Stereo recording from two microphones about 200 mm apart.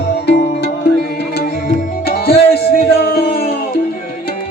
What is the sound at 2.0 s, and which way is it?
Music, 50° left (ahead or behind).